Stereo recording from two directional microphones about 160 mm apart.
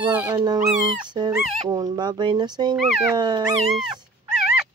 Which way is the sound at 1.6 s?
25° right (ahead or behind).